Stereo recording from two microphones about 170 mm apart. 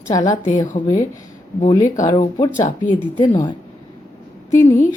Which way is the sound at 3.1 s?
25° left (ahead or behind).